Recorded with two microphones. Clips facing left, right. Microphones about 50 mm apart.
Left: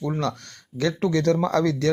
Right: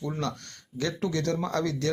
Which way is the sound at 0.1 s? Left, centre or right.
Left.